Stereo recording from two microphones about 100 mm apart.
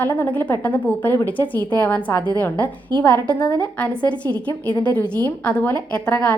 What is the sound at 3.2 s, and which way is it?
A woman's voice, 15° left (ahead or behind).